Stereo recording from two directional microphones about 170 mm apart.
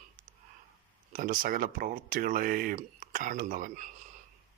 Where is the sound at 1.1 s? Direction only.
55° right (ahead or behind).